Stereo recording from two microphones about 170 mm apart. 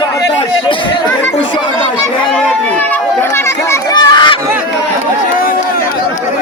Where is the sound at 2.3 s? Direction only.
10° left (ahead or behind); by 4.4 s 25° left (ahead or behind).